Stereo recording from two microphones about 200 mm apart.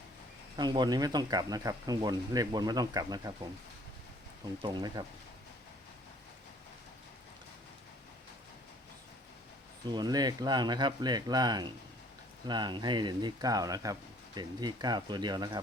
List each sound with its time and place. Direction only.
0.5 s speech: 20° right (ahead or behind)
4.6 s speech: 20° right (ahead or behind)
9.9 s speech: 20° right (ahead or behind)